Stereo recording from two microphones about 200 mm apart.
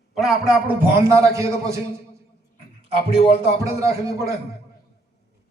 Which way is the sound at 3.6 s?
15° right (ahead or behind).